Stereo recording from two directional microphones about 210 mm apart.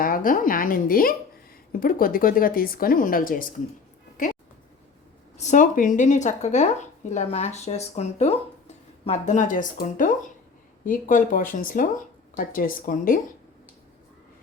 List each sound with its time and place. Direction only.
0.0 s speech: 40° left (ahead or behind)
5.4 s speech: 35° left (ahead or behind)